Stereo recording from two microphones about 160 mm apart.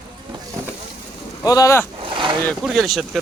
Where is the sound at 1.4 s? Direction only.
20° left (ahead or behind).